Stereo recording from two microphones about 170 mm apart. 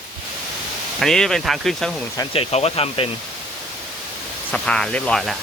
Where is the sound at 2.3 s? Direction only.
35° left (ahead or behind).